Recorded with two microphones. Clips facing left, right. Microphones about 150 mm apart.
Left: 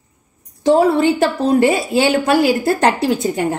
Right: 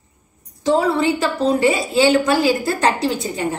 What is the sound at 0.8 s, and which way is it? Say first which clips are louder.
A woman's voice: left 4 dB; 55° left (ahead or behind).